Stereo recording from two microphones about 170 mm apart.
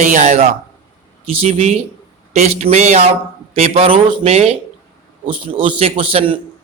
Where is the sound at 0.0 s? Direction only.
45° right (ahead or behind).